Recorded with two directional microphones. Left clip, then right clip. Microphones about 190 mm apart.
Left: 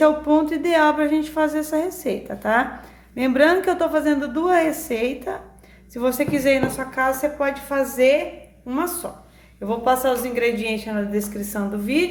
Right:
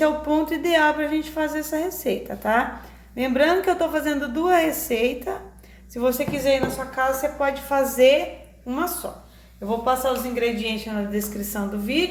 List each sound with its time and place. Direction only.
0.0 s a woman's voice: 15° left (ahead or behind)
9.6 s a woman's voice: 40° left (ahead or behind); by 12.0 s 20° left (ahead or behind)